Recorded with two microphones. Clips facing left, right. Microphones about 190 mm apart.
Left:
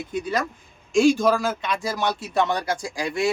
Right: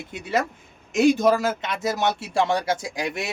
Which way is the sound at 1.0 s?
20° right (ahead or behind).